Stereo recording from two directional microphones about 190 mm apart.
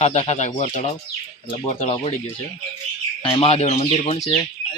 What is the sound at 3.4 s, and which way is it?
Speech, 35° left (ahead or behind).